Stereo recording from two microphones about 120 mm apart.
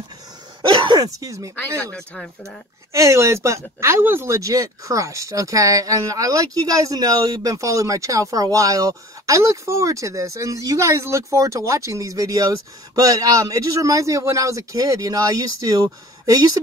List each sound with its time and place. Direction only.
0.6 s throat clearing: 40° right (ahead or behind)
1.2 s speech: 30° right (ahead or behind)
1.8 s speech: 10° left (ahead or behind)
2.9 s speech: 25° right (ahead or behind)